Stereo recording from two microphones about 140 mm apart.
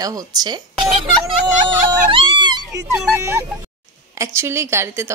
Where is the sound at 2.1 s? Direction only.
35° right (ahead or behind).